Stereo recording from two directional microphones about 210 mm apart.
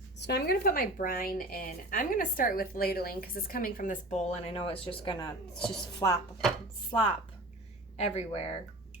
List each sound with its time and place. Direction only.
0.2 s a woman's voice: 50° left (ahead or behind); by 5.3 s 25° left (ahead or behind)
5.5 s a woman's voice: 5° left (ahead or behind)
6.0 s speech: 20° left (ahead or behind)
7.9 s speech: 30° left (ahead or behind)